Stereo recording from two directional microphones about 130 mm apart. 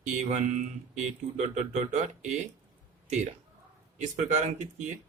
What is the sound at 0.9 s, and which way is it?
Speech, 65° right (ahead or behind).